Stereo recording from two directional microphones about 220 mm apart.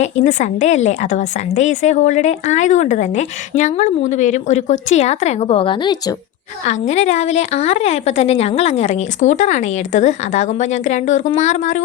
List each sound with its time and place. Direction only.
0.0 s a woman's voice: 30° left (ahead or behind)
6.7 s a woman's voice: 30° left (ahead or behind)